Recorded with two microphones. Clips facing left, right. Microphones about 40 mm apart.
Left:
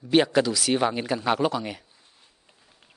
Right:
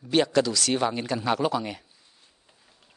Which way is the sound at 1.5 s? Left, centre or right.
Centre.